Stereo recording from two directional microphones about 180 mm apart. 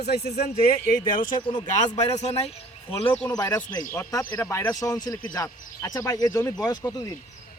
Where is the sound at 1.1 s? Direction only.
50° left (ahead or behind); by 3.1 s 35° left (ahead or behind).